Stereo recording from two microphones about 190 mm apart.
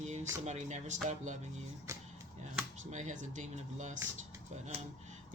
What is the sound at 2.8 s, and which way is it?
Speech, 40° right (ahead or behind).